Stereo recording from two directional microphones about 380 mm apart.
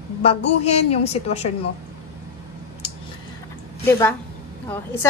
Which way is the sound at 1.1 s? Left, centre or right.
Centre.